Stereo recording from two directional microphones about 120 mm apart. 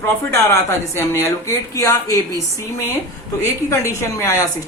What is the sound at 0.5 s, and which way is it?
A woman's voice, 20° left (ahead or behind).